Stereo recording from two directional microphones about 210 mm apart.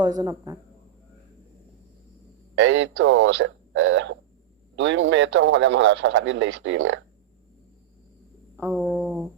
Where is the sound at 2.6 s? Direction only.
60° right (ahead or behind).